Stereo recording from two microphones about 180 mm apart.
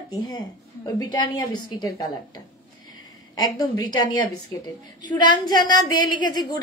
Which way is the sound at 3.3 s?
20° left (ahead or behind).